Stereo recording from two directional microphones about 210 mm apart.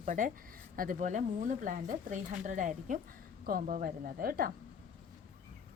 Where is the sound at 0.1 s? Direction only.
40° right (ahead or behind).